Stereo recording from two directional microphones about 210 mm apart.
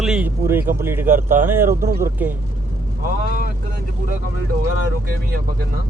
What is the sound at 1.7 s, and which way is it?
Speech, 45° right (ahead or behind).